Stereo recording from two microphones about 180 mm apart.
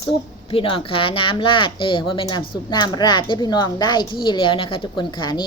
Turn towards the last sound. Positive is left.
turn(degrees=25)  # may be behind; listen again after turning